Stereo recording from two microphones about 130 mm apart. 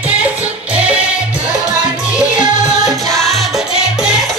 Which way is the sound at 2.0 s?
10° right (ahead or behind).